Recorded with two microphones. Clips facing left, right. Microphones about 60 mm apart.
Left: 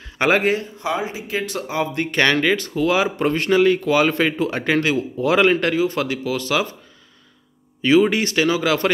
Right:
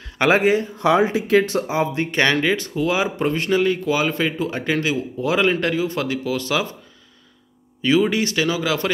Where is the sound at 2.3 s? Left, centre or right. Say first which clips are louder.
Left 1 dB; left.